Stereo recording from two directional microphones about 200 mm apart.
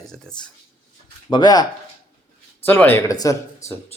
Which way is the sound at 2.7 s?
10° left (ahead or behind).